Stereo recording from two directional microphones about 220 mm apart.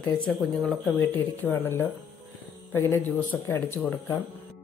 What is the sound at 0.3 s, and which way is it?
Speech, centre (ahead or behind).